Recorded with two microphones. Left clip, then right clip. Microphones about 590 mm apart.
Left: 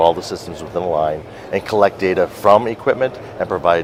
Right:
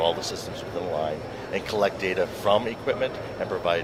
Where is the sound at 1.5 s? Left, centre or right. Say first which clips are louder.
Left 10 dB; left.